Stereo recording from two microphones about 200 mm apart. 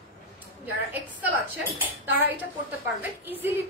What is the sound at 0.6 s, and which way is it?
A woman's voice, 10° right (ahead or behind).